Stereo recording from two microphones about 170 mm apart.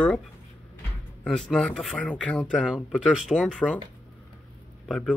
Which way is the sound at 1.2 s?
5° left (ahead or behind).